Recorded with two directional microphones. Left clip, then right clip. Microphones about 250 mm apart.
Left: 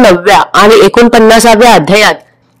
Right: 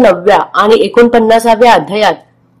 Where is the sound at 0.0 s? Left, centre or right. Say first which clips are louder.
Left 3 dB; left.